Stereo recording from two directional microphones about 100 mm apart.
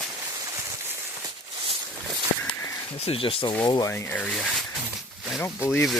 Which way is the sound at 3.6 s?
50° left (ahead or behind).